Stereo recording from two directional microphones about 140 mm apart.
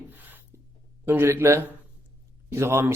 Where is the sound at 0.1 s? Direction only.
15° right (ahead or behind).